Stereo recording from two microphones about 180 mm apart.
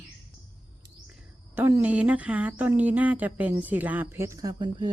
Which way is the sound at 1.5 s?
10° right (ahead or behind).